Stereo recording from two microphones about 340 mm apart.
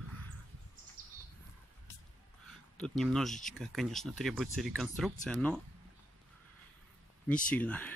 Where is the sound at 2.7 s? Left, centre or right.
Centre.